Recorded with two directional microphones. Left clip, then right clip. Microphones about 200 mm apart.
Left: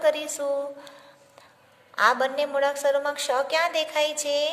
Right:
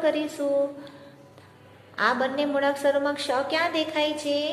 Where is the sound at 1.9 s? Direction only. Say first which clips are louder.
Left 3 dB; 40° left (ahead or behind).